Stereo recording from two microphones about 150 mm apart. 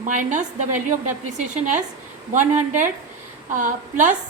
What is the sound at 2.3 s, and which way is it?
A woman's voice, 55° right (ahead or behind).